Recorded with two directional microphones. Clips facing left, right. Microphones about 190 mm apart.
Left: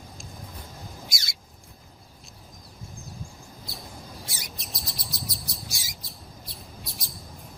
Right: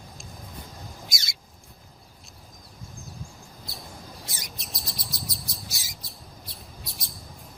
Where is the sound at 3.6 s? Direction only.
Centre (ahead or behind).